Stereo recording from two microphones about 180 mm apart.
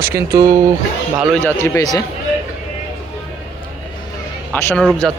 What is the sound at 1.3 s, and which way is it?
Speech, 10° left (ahead or behind).